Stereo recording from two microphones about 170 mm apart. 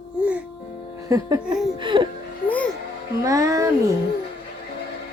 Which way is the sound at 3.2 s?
20° right (ahead or behind).